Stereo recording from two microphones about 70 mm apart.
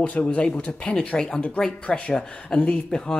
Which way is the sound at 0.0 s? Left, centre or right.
Centre.